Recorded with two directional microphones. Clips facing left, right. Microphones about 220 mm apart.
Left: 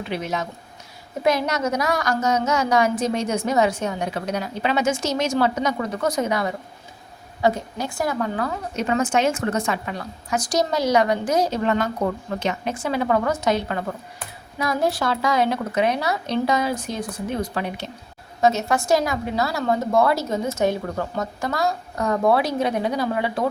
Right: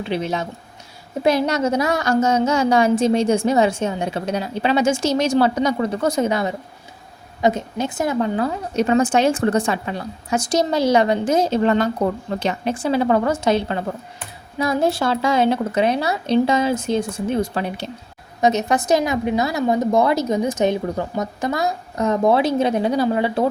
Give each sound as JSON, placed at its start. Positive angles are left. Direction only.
{"t": 0.1, "sound": "a woman's voice", "side_deg": -30}
{"t": 18.4, "sound": "a woman's voice", "side_deg": -20}